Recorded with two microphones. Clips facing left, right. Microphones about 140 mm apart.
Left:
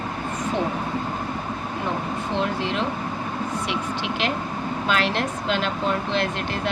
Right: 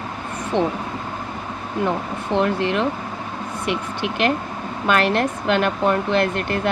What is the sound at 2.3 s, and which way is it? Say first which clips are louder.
Speech: right 6 dB; 60° right (ahead or behind).